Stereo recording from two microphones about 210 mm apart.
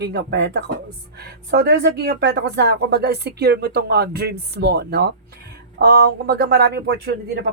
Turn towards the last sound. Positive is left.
turn(degrees=-50)  # may be behind; listen again after turning